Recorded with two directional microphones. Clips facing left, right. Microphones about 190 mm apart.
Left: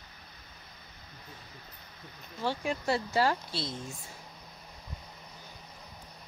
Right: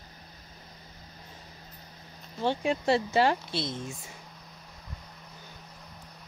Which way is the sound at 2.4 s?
20° right (ahead or behind).